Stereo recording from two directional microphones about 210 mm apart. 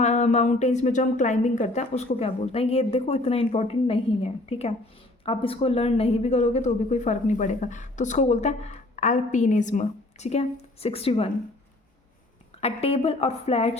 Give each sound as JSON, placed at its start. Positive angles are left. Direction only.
{"t": 0.0, "sound": "speech", "side_deg": 35}
{"t": 12.5, "sound": "a woman's voice", "side_deg": 30}